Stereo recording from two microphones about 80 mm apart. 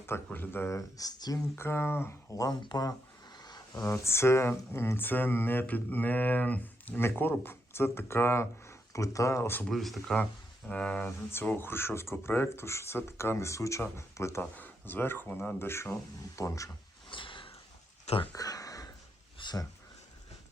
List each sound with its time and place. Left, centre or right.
0.3 s speech: left
1.5 s speech: left
2.3 s speech: left
2.6 s speech: left
3.3 s a sound: left
3.8 s speech: left
9.6 s speech: centre
10.7 s speech: centre
11.3 s speech: left
14.5 s speech: left
17.1 s a sound: left
18.3 s a sound: left
19.4 s a sound: left